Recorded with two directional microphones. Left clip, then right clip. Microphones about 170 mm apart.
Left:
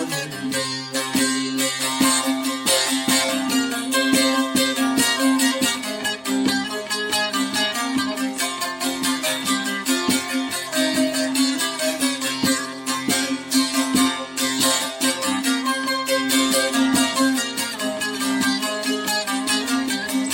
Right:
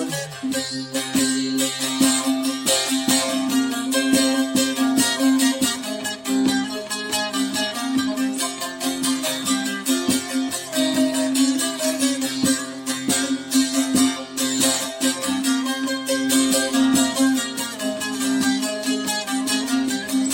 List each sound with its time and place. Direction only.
0.9 s music: 15° left (ahead or behind)